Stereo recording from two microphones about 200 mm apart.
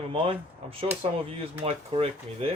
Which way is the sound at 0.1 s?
25° right (ahead or behind).